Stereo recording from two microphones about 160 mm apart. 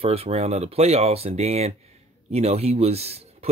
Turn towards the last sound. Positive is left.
turn(degrees=-40)  # may be behind; listen again after turning